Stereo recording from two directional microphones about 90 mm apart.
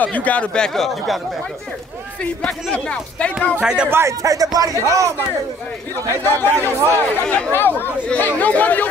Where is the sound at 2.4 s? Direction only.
10° left (ahead or behind).